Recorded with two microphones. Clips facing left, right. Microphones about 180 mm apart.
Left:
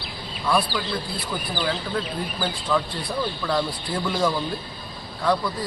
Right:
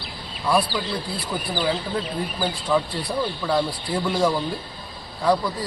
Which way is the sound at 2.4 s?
15° right (ahead or behind).